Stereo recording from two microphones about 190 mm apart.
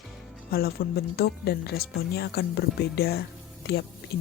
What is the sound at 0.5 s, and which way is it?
Speech, 55° left (ahead or behind).